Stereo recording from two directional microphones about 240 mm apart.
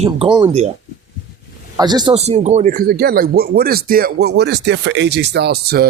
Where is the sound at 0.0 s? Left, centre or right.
Right.